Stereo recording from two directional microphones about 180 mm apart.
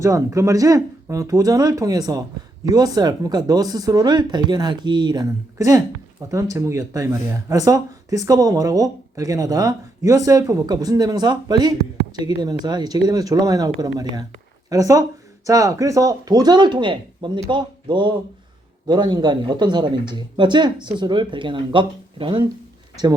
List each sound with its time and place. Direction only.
0.0 s speech: 15° right (ahead or behind)